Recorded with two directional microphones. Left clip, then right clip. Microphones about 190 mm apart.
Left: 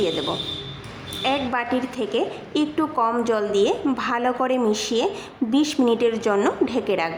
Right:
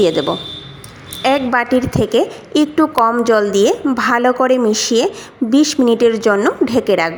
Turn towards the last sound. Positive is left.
turn(degrees=-30)  # may be behind; listen again after turning